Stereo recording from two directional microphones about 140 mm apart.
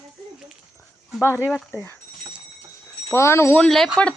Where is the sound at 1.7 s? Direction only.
15° left (ahead or behind).